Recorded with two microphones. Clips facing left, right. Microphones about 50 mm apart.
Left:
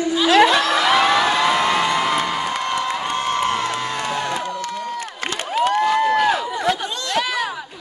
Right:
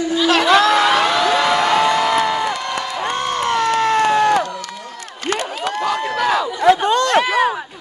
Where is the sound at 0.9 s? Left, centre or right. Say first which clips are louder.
Even; centre.